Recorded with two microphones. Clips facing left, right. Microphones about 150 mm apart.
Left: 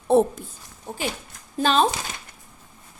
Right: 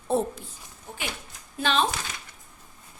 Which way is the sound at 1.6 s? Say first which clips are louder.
Left 5 dB; 40° left (ahead or behind).